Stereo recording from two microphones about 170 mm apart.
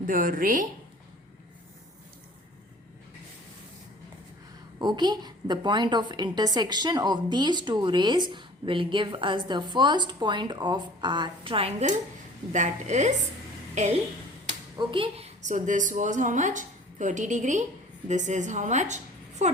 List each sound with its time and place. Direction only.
0.0 s speech: 55° right (ahead or behind)
4.8 s a woman's voice: 25° right (ahead or behind)
12.5 s a woman's voice: 45° right (ahead or behind)
14.8 s speech: 30° right (ahead or behind)
15.4 s a woman's voice: 45° right (ahead or behind)